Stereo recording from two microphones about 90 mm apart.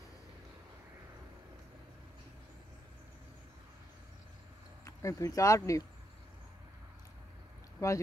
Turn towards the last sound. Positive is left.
turn(degrees=35)  # may be behind; listen again after turning